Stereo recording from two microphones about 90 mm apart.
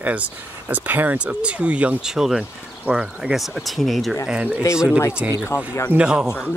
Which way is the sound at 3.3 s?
Centre (ahead or behind).